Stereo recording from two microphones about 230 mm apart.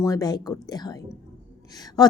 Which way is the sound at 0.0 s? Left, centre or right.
Centre.